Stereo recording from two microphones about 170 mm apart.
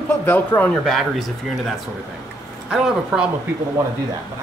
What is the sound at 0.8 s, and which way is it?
Speech, centre (ahead or behind).